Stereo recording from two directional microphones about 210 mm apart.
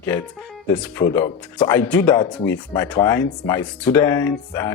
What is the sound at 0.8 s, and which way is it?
Speech, 10° left (ahead or behind).